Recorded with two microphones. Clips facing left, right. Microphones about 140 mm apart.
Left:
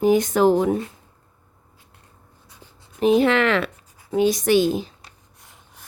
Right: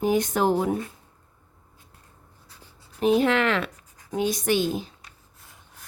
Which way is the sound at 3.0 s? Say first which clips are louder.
Left 4 dB; 90° left.